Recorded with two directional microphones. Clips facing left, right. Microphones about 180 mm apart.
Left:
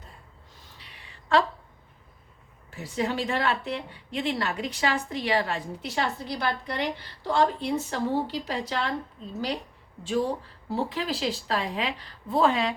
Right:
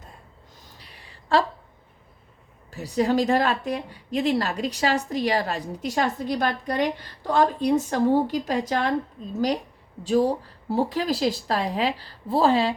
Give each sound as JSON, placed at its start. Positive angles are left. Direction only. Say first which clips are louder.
{"t": 0.7, "sound": "a sound", "louder": "right 2 dB", "side_deg": -40}
{"t": 2.6, "sound": "speech", "louder": "right 6 dB", "side_deg": -40}
{"t": 10.0, "sound": "speech", "louder": "right 6 dB", "side_deg": -40}